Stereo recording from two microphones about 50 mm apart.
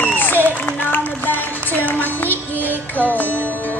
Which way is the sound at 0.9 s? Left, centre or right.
Left.